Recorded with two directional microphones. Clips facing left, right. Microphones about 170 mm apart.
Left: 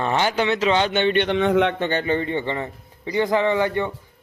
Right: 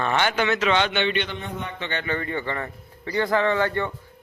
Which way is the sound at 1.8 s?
40° left (ahead or behind).